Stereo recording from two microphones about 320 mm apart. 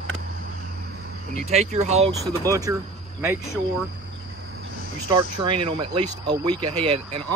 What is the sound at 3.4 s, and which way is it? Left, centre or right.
Speech, centre.